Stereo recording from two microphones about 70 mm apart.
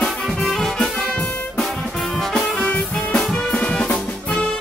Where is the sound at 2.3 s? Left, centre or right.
Centre.